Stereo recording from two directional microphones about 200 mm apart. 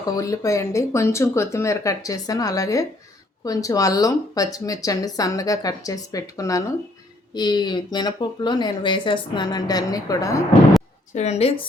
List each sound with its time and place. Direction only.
0.2 s speech: 15° left (ahead or behind)
11.1 s speech: 35° left (ahead or behind)